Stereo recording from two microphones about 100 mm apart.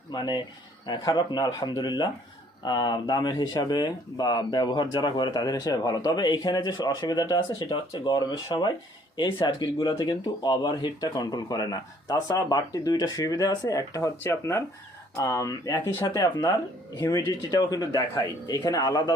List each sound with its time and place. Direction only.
0.1 s speech: 45° left (ahead or behind)